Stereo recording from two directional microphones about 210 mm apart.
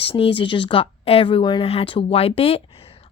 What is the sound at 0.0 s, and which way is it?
Speech, 25° left (ahead or behind).